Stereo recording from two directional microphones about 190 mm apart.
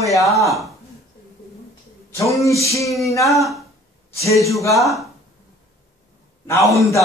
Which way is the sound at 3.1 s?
15° left (ahead or behind).